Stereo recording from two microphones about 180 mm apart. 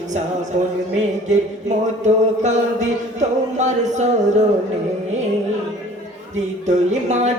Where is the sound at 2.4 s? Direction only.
40° right (ahead or behind).